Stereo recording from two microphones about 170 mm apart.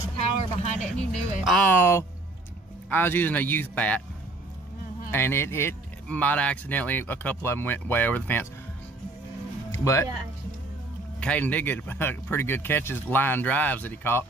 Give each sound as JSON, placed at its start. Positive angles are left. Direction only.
{"t": 0.2, "sound": "a sound", "side_deg": 40}
{"t": 1.4, "sound": "speech", "side_deg": 5}
{"t": 5.1, "sound": "speech", "side_deg": 15}
{"t": 9.7, "sound": "speech", "side_deg": 15}
{"t": 11.1, "sound": "speech", "side_deg": 10}